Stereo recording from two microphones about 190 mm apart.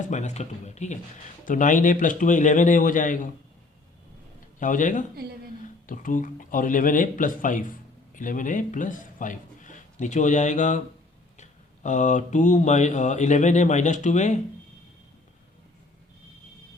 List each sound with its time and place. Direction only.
0.1 s speech: 40° left (ahead or behind)
4.6 s a man's voice: 45° left (ahead or behind)